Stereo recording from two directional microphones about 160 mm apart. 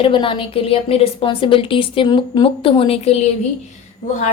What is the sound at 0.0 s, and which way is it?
A woman's voice, 30° left (ahead or behind).